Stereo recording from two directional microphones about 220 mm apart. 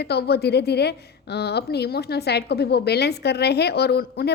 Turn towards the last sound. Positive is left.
turn(degrees=45)  # may be behind; listen again after turning